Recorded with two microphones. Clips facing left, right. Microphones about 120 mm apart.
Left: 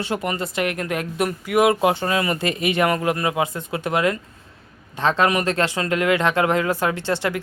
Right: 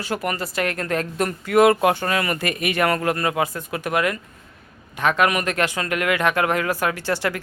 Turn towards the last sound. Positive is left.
turn(degrees=20)  # may be behind; listen again after turning